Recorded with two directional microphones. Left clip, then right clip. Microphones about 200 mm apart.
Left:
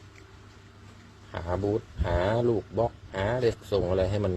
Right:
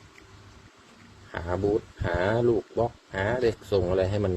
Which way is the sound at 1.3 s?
15° right (ahead or behind).